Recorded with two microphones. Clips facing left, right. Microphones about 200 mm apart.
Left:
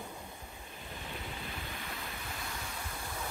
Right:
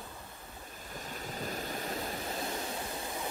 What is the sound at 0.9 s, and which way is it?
Waves, 40° right (ahead or behind).